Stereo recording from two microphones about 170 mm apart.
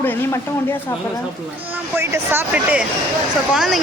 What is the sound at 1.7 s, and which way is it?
Speech, 10° right (ahead or behind).